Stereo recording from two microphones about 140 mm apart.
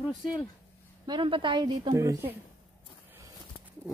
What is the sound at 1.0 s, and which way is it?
Speech, 35° right (ahead or behind).